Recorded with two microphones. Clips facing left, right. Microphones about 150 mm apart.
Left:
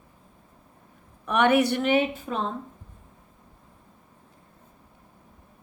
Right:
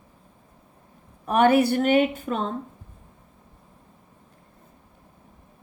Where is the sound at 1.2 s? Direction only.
35° right (ahead or behind).